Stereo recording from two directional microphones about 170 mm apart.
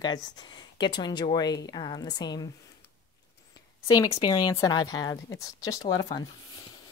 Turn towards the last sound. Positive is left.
turn(degrees=25)  # may be behind; listen again after turning